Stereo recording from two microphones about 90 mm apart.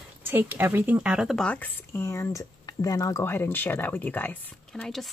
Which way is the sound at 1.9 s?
35° left (ahead or behind).